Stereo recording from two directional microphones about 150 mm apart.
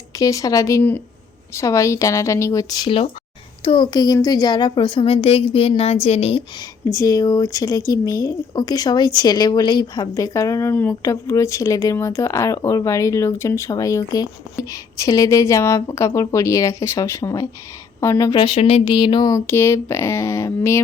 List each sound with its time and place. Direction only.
0.2 s a woman's voice: 20° left (ahead or behind); by 6.4 s 45° left (ahead or behind)
6.6 s speech: 20° left (ahead or behind)